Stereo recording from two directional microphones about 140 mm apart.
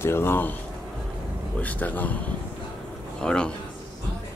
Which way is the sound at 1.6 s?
10° left (ahead or behind).